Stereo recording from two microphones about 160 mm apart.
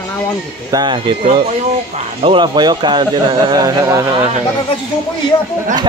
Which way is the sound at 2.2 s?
30° right (ahead or behind).